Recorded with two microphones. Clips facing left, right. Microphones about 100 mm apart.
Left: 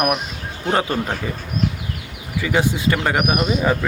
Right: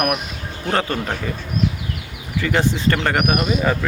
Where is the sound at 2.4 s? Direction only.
10° left (ahead or behind).